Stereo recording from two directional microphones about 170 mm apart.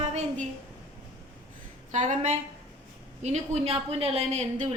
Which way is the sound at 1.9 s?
45° right (ahead or behind).